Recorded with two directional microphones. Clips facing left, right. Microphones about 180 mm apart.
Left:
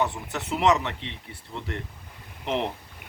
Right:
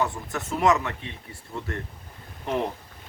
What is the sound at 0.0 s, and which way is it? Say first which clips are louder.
Speech: even; 20° left (ahead or behind).